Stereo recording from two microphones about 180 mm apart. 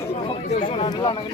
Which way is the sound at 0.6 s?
30° left (ahead or behind).